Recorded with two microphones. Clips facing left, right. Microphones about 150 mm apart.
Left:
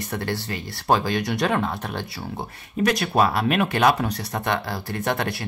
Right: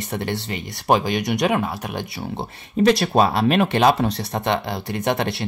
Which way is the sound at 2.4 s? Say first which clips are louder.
Right 4 dB; 30° right (ahead or behind).